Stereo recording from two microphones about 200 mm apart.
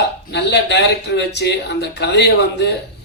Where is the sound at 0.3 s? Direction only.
60° left (ahead or behind).